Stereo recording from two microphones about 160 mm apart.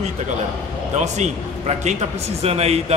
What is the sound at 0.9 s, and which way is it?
Speech, 45° right (ahead or behind).